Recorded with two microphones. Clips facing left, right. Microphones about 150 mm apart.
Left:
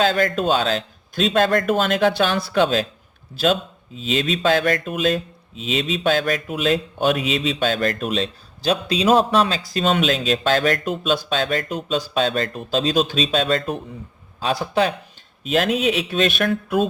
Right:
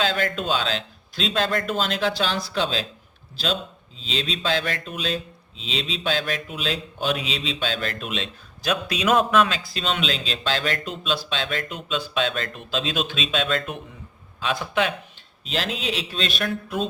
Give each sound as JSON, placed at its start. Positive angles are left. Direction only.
{"t": 0.0, "sound": "a man's voice", "side_deg": 40}
{"t": 15.4, "sound": "speech", "side_deg": 50}